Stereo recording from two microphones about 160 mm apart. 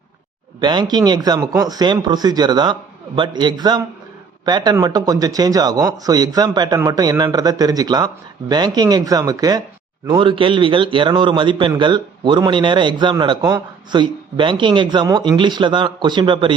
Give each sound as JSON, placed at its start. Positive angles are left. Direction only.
{"t": 0.6, "sound": "speech", "side_deg": -25}